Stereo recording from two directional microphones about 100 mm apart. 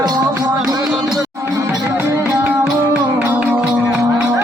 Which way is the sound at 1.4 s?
30° right (ahead or behind).